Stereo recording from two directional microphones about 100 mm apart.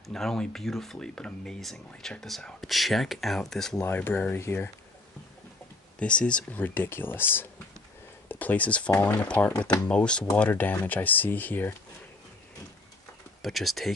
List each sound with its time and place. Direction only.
0.1 s speech: 5° left (ahead or behind)
3.8 s speech: 20° left (ahead or behind)
5.9 s speech: 10° left (ahead or behind)
13.4 s speech: centre (ahead or behind)